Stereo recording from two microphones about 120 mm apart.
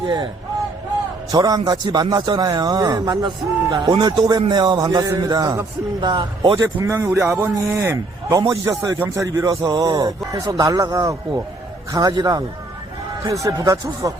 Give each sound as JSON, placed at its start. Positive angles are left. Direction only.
{"t": 0.0, "sound": "speech", "side_deg": -40}
{"t": 1.3, "sound": "a man's voice", "side_deg": -35}
{"t": 6.7, "sound": "a man's voice", "side_deg": -20}
{"t": 7.5, "sound": "a man's voice", "side_deg": -25}